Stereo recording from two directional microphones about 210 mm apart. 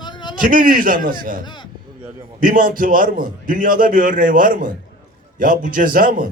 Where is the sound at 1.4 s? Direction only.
20° left (ahead or behind).